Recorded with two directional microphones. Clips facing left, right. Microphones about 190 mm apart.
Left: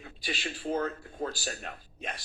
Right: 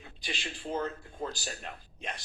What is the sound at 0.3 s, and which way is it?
Speech, 5° left (ahead or behind).